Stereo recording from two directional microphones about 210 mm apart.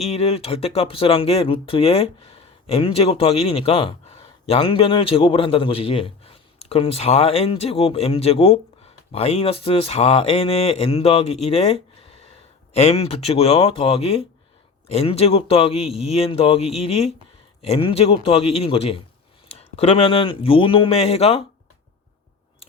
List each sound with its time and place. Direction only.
0.0 s speech: 30° left (ahead or behind)